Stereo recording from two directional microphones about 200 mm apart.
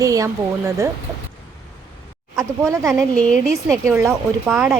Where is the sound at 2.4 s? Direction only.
15° right (ahead or behind).